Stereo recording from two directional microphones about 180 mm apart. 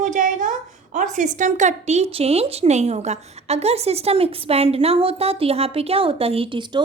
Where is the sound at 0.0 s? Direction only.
45° right (ahead or behind).